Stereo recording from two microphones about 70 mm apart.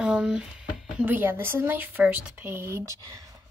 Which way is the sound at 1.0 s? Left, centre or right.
Right.